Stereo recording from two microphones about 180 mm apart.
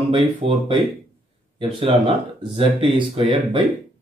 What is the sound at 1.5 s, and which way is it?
Speech, 30° right (ahead or behind).